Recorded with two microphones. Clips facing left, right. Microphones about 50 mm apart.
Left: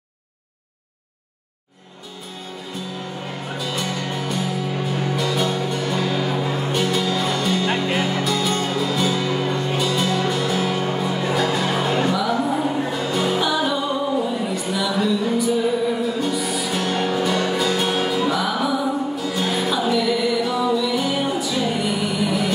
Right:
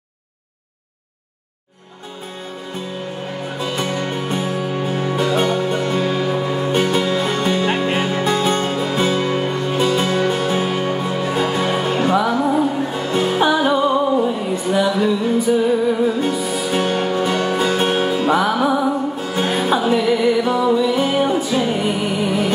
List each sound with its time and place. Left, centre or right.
3.5 s music: right; by 6.7 s centre
6.7 s music: right
11.9 s music: right